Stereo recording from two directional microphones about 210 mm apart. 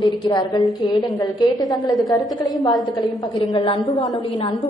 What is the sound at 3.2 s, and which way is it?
A woman's voice, 20° left (ahead or behind).